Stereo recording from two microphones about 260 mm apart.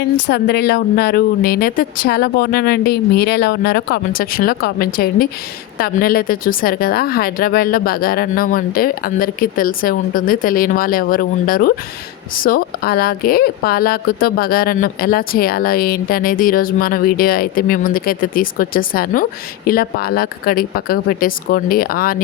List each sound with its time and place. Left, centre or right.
0.3 s speech: left